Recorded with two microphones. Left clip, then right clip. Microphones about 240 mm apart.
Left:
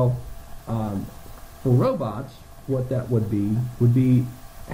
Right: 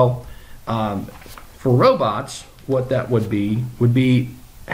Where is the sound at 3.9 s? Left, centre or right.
Centre.